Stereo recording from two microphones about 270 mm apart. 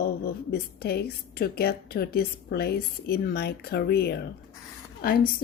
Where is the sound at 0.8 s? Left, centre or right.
Left.